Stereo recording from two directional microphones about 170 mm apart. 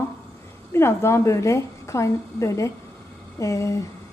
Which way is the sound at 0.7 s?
15° left (ahead or behind).